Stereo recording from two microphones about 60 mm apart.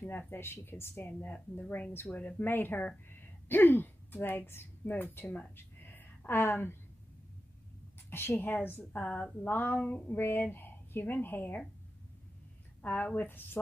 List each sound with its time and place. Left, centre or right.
0.3 s speech: left
1.0 s a woman's voice: left
2.4 s a woman's voice: left
5.6 s a sound: left
8.1 s a woman's voice: left; by 9.5 s centre
9.5 s speech: left
12.8 s a woman's voice: left